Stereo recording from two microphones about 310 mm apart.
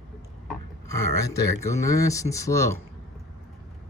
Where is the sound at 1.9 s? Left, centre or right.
Centre.